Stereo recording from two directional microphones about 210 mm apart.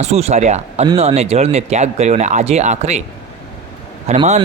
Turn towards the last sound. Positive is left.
turn(degrees=-30)  # may be behind; listen again after turning